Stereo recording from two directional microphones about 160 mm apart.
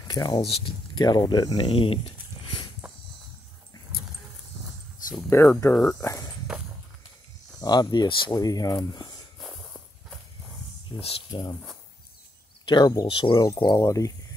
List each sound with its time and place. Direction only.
0.1 s speech: 25° left (ahead or behind)
5.3 s speech: 15° left (ahead or behind)
6.5 s a sound: 5° right (ahead or behind)
7.6 s speech: 25° left (ahead or behind)
11.0 s speech: 30° left (ahead or behind)
12.6 s speech: 25° left (ahead or behind)